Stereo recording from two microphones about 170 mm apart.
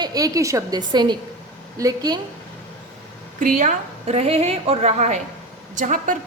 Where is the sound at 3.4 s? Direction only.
50° right (ahead or behind).